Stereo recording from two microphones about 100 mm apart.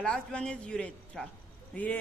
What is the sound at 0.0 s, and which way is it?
A woman's voice, 10° left (ahead or behind).